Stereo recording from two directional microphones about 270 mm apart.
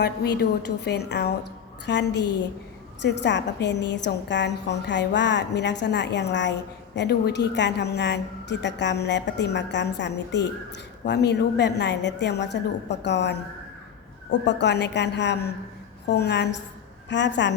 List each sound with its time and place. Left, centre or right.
0.0 s a woman's voice: left